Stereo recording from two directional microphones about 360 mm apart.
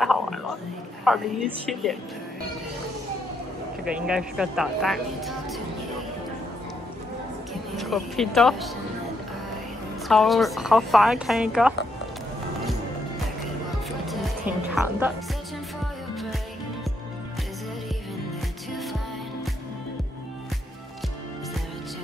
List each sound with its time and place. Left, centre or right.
0.0 s whispering: centre
1.0 s speech: centre
3.8 s speech: centre
7.7 s speech: centre
10.0 s speech: centre
14.7 s speech: centre